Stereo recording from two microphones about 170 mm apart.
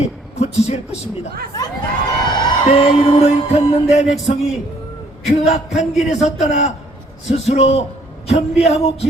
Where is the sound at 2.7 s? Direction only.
40° left (ahead or behind).